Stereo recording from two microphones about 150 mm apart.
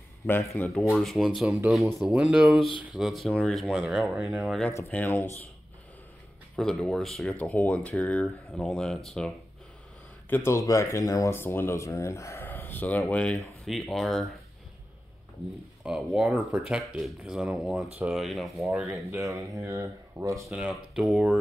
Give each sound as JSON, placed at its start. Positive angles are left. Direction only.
{"t": 0.3, "sound": "speech", "side_deg": 15}
{"t": 0.9, "sound": "speech", "side_deg": 0}
{"t": 4.9, "sound": "speech", "side_deg": 15}
{"t": 6.5, "sound": "speech", "side_deg": 5}
{"t": 10.3, "sound": "speech", "side_deg": 20}
{"t": 15.8, "sound": "speech", "side_deg": -5}
{"t": 18.9, "sound": "speech", "side_deg": -20}
{"t": 20.4, "sound": "speech", "side_deg": -5}